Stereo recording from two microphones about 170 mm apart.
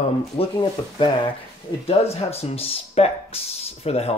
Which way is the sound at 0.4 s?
30° left (ahead or behind).